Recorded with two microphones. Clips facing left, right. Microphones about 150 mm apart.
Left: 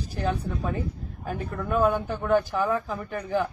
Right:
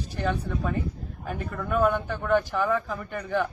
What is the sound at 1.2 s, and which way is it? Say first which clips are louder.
Speech: left 1 dB; 30° left (ahead or behind).